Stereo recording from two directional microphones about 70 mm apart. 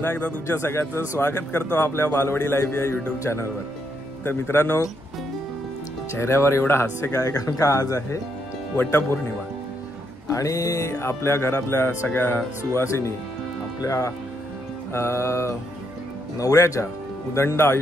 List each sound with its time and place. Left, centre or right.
0.0 s speech: left
0.5 s speech: left
6.1 s speech: left
8.7 s speech: left
10.2 s speech: left